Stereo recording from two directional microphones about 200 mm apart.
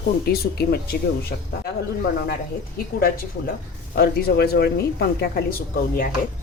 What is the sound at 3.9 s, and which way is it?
Speech, 50° left (ahead or behind).